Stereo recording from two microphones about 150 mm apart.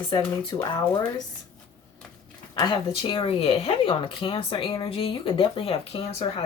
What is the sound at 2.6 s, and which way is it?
Speech, 35° left (ahead or behind).